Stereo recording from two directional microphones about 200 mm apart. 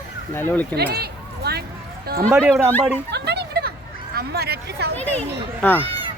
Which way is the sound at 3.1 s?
55° right (ahead or behind).